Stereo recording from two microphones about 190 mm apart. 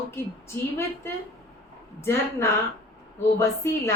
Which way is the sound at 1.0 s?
10° left (ahead or behind).